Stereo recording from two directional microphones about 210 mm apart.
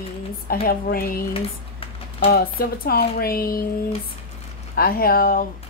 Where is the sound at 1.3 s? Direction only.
25° left (ahead or behind).